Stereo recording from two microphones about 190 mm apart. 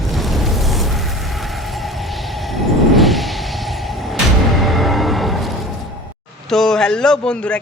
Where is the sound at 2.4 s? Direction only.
Centre (ahead or behind).